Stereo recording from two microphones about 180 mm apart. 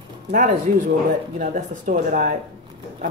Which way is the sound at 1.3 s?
50° right (ahead or behind).